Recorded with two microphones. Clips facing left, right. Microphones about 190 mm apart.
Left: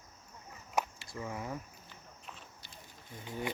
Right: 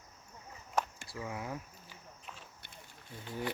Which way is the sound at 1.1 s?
5° right (ahead or behind).